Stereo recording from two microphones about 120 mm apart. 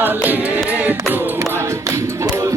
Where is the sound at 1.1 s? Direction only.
20° right (ahead or behind).